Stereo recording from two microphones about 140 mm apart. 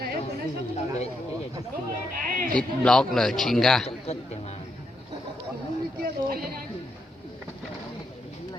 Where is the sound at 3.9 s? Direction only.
50° left (ahead or behind).